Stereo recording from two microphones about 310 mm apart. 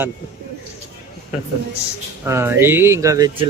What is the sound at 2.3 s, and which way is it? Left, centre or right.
Speech, centre.